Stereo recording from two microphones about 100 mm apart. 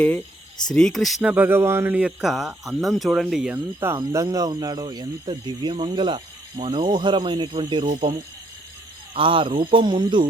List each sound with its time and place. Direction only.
0.7 s speech: 5° left (ahead or behind)
1.2 s speech: 15° right (ahead or behind)
2.0 s speech: 10° right (ahead or behind)
3.5 s speech: 25° right (ahead or behind); by 7.9 s 50° right (ahead or behind)
9.1 s speech: 60° right (ahead or behind)